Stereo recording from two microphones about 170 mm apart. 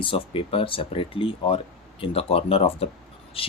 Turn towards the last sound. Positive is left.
turn(degrees=35)  # may be behind; listen again after turning